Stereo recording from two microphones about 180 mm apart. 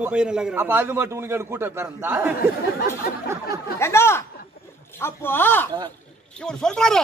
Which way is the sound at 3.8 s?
15° left (ahead or behind).